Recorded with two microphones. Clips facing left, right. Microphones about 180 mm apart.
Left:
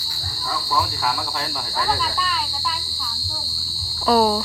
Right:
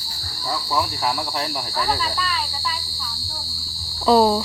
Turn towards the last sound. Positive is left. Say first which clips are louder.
# right 2 dB
turn(degrees=-20)  # may be behind; listen again after turning